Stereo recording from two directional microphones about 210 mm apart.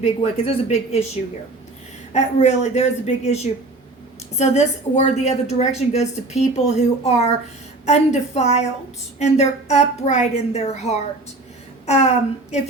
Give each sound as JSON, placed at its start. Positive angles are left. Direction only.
{"t": 0.0, "sound": "speech", "side_deg": 30}
{"t": 2.1, "sound": "a woman's voice", "side_deg": 30}